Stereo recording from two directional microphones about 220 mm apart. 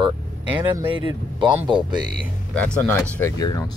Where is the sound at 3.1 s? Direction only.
15° left (ahead or behind).